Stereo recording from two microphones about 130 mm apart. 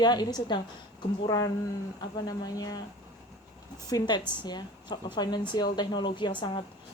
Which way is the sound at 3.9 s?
30° left (ahead or behind).